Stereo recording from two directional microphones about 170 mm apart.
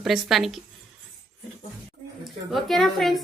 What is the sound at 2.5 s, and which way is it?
Speech, centre (ahead or behind).